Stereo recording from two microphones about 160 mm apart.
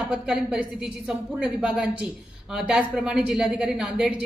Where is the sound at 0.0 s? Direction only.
5° right (ahead or behind).